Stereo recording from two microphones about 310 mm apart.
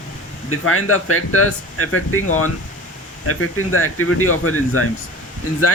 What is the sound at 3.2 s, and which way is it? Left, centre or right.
Speech, left.